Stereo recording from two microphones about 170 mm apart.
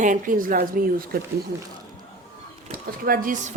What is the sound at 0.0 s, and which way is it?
A woman's voice, 50° right (ahead or behind).